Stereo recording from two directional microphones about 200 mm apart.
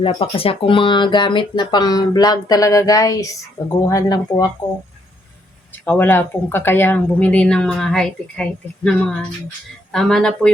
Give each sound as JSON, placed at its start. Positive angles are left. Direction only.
{"t": 0.0, "sound": "speech", "side_deg": 25}
{"t": 5.8, "sound": "speech", "side_deg": 10}